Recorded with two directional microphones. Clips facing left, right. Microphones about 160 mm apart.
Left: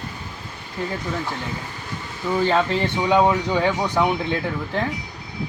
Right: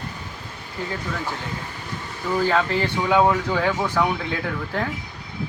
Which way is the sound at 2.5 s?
20° left (ahead or behind).